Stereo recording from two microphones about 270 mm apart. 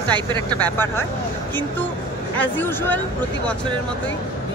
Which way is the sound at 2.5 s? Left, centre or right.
Centre.